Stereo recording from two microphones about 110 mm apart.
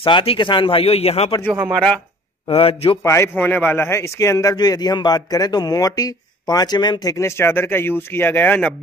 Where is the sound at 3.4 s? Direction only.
15° left (ahead or behind).